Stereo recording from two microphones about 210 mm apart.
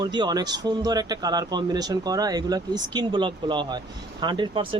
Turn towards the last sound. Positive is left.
turn(degrees=-25)  # may be behind; listen again after turning